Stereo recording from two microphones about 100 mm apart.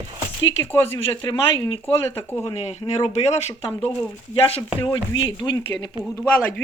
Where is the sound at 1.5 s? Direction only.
55° left (ahead or behind).